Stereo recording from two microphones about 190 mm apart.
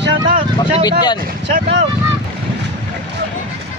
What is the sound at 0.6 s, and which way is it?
Speech, 20° left (ahead or behind).